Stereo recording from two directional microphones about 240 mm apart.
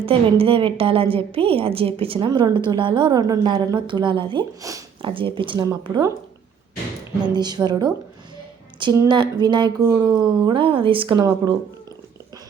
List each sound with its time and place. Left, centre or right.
0.0 s a woman's voice: right
7.3 s a woman's voice: centre